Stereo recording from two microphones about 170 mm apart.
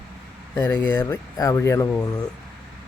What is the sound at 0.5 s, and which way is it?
Speech, 15° left (ahead or behind).